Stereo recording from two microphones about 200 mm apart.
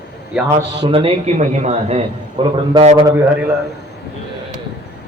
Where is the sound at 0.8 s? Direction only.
25° right (ahead or behind).